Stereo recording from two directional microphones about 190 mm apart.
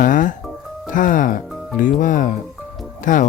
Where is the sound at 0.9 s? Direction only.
45° left (ahead or behind).